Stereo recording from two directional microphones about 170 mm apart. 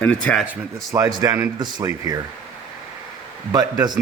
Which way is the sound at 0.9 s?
20° right (ahead or behind).